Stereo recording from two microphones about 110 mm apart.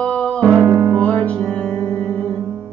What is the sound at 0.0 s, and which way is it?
Music, 10° left (ahead or behind).